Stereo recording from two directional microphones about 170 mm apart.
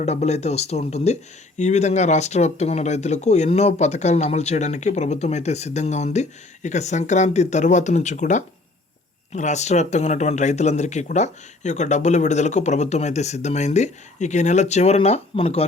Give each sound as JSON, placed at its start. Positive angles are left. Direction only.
{"t": 0.0, "sound": "speech", "side_deg": 40}